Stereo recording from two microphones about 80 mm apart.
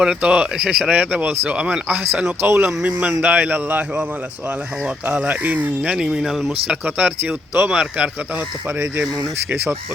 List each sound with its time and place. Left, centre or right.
0.0 s speech: centre
2.4 s speech: right
2.8 s speech: centre
6.5 s speech: centre
7.7 s speech: centre